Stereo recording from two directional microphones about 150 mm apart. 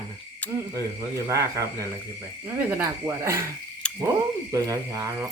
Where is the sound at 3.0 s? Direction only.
20° right (ahead or behind).